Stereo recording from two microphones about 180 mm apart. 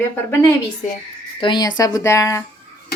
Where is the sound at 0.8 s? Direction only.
45° left (ahead or behind).